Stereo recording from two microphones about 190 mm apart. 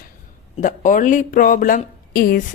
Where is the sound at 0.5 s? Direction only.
40° left (ahead or behind).